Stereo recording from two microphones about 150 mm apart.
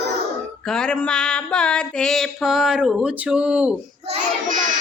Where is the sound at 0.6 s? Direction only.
5° left (ahead or behind).